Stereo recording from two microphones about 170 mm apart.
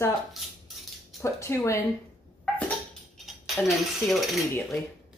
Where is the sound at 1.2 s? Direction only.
15° left (ahead or behind).